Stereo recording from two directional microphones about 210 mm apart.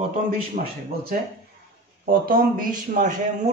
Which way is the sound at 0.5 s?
45° right (ahead or behind).